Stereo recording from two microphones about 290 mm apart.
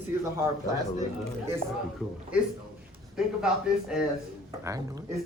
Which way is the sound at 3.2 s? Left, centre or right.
Centre.